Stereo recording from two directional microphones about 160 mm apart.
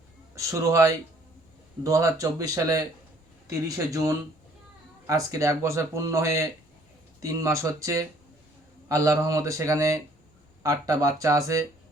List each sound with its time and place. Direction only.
0.3 s speech: 20° right (ahead or behind)